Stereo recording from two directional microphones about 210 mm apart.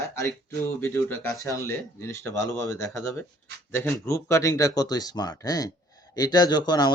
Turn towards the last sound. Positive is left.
turn(degrees=20)  # may be behind; listen again after turning